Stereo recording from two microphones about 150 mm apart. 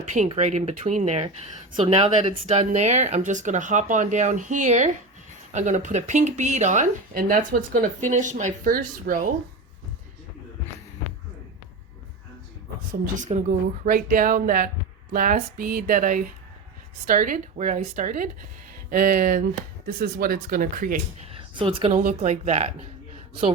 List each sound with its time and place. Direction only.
0.3 s speech: 50° right (ahead or behind); by 9.3 s 65° right (ahead or behind)
13.1 s speech: 55° right (ahead or behind)
19.9 s speech: 90° right; by 20.9 s 70° right (ahead or behind)
21.3 s a sound: 35° right (ahead or behind)
21.9 s speech: 55° right (ahead or behind)